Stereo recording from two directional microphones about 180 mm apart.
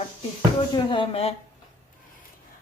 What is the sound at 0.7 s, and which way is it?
Speech, 25° left (ahead or behind).